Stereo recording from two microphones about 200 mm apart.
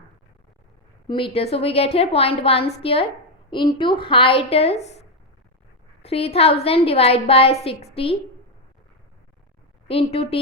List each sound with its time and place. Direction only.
1.0 s a woman's voice: 25° left (ahead or behind)
9.8 s a woman's voice: 30° left (ahead or behind)